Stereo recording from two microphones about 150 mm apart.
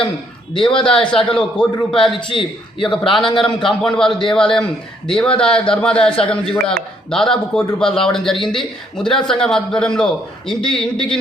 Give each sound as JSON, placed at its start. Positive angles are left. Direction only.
{"t": 0.5, "sound": "speech", "side_deg": 35}
{"t": 0.9, "sound": "a man's voice", "side_deg": 5}
{"t": 2.1, "sound": "speech", "side_deg": 35}
{"t": 3.0, "sound": "a man's voice", "side_deg": 0}